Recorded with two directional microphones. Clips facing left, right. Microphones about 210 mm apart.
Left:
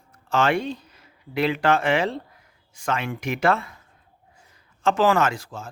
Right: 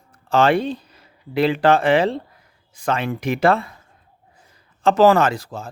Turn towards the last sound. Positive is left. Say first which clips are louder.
# right 4 dB
turn(degrees=-35)  # may be behind; listen again after turning